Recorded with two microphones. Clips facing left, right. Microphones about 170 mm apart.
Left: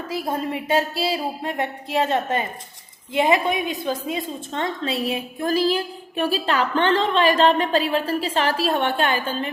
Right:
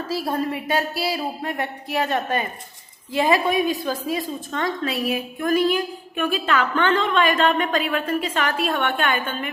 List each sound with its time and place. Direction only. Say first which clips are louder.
0.1 s a woman's voice: right 1 dB; 20° left (ahead or behind)